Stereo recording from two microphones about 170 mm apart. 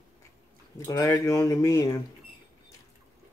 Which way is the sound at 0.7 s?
15° left (ahead or behind).